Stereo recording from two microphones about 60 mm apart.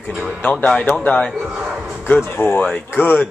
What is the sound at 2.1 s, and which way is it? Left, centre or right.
Speech, left.